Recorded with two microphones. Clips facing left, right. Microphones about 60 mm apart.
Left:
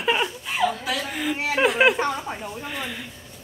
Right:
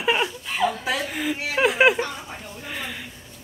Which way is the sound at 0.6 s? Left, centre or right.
Centre.